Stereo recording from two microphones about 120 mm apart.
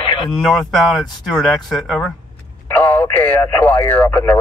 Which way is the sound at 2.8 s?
15° left (ahead or behind).